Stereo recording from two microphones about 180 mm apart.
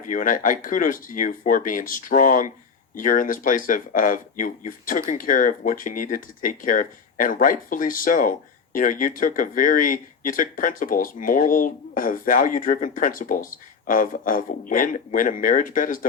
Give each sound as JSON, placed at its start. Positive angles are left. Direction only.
{"t": 0.1, "sound": "speech", "side_deg": 50}